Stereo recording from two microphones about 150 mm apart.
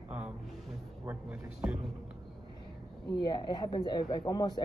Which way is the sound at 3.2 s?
30° left (ahead or behind).